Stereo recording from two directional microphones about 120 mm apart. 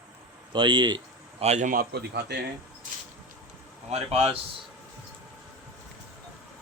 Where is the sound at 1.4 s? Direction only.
80° right.